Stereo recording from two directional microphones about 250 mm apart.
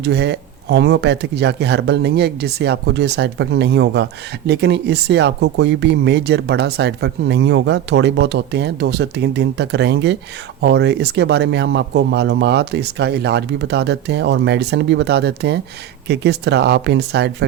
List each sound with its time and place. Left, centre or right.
0.0 s speech: right